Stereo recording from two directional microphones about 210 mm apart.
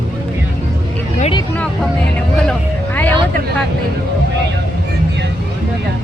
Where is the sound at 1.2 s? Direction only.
25° left (ahead or behind).